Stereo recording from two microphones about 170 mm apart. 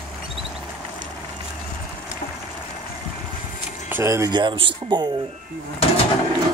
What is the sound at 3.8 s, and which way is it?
Speech, 15° right (ahead or behind).